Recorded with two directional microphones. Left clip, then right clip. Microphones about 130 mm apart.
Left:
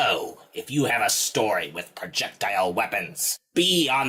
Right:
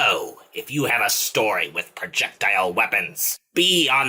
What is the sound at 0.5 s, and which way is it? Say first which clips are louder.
Speech: right 2 dB; 35° left (ahead or behind).